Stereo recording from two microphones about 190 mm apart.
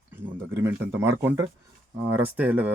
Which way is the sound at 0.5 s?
10° right (ahead or behind).